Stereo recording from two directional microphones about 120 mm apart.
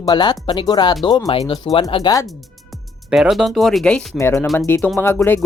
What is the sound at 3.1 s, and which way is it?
Speech, 5° right (ahead or behind).